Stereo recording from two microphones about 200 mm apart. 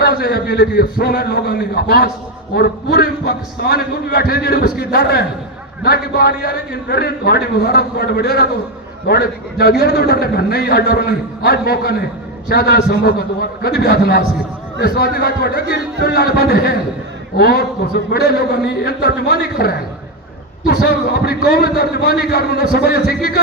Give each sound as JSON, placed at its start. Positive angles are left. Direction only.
{"t": 0.0, "sound": "a man's voice", "side_deg": 50}